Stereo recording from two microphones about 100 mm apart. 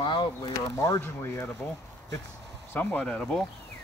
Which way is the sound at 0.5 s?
35° left (ahead or behind).